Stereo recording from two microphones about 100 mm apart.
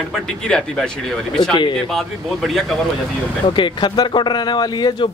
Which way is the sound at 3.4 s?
55° left (ahead or behind).